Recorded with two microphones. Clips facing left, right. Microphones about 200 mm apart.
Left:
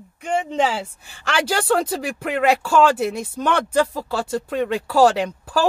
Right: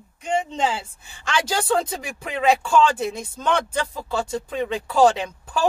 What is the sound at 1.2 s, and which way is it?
Speech, 75° left (ahead or behind).